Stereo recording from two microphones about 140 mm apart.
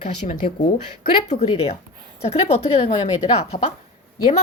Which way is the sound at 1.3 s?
45° left (ahead or behind).